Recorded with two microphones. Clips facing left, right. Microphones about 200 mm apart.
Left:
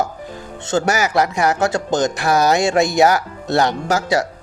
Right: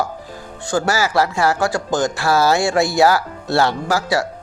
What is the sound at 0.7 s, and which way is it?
Speech, 20° left (ahead or behind).